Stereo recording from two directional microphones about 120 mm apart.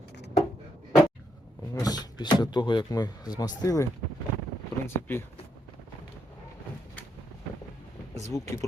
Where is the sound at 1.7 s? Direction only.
30° left (ahead or behind).